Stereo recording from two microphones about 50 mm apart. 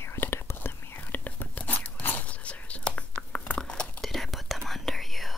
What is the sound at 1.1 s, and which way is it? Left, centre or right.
Whispering, left.